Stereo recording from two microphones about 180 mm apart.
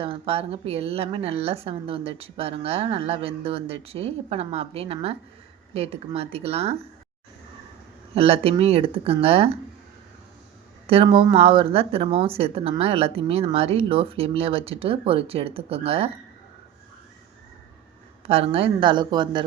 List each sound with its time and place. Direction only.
0.0 s speech: 30° right (ahead or behind)
8.1 s speech: 35° right (ahead or behind)
10.8 s speech: 30° right (ahead or behind)
18.3 s a woman's voice: 35° right (ahead or behind)